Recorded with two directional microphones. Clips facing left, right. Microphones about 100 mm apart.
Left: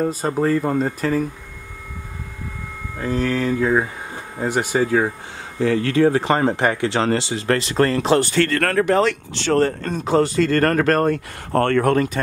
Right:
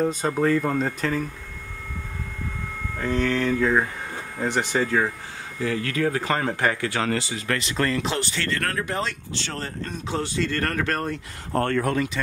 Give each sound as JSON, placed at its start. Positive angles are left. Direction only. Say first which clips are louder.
{"t": 0.0, "sound": "speech", "louder": "left 2 dB", "side_deg": 5}
{"t": 3.0, "sound": "speech", "louder": "left 2 dB", "side_deg": 5}
{"t": 5.8, "sound": "speech", "louder": "left 9 dB", "side_deg": 30}
{"t": 7.4, "sound": "speech", "louder": "left 8 dB", "side_deg": 40}